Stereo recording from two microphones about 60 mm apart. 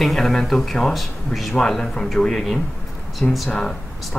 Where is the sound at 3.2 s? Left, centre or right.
Left.